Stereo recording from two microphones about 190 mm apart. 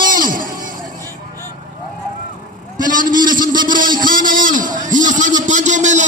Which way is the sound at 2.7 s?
45° right (ahead or behind).